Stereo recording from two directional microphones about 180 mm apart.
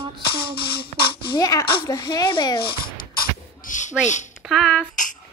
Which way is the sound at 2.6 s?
60° left (ahead or behind).